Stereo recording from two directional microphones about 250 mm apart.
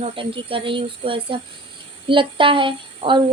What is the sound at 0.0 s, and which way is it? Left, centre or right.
A woman's voice, right.